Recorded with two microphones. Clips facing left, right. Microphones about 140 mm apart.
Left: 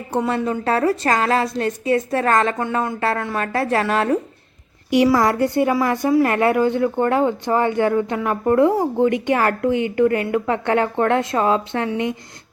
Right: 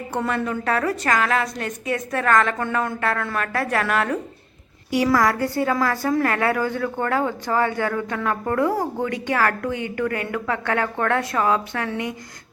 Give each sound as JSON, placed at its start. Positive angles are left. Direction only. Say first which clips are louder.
{"t": 0.3, "sound": "a woman's voice", "louder": "left 2 dB", "side_deg": 20}
{"t": 2.6, "sound": "speech", "louder": "left 2 dB", "side_deg": 15}
{"t": 3.0, "sound": "a woman's voice", "louder": "left 3 dB", "side_deg": 30}